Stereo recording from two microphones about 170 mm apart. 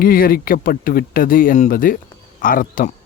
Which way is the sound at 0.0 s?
60° left (ahead or behind).